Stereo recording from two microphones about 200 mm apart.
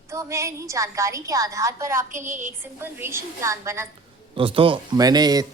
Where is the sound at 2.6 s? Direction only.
10° right (ahead or behind).